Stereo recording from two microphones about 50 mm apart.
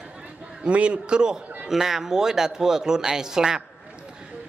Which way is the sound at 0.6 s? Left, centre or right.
Right.